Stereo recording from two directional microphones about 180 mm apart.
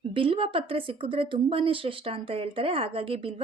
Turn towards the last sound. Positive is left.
turn(degrees=-30)  # may be behind; listen again after turning